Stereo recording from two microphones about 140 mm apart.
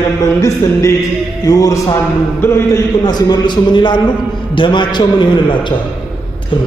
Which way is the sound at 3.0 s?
30° left (ahead or behind).